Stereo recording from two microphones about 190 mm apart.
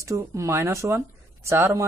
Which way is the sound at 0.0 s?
15° right (ahead or behind).